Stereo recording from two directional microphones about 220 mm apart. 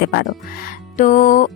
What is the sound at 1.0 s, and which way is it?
Speech, 35° left (ahead or behind).